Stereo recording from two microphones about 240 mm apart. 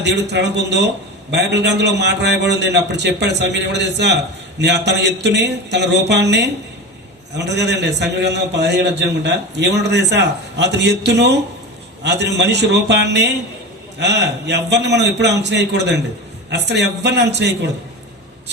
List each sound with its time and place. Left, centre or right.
0.0 s a man's voice: right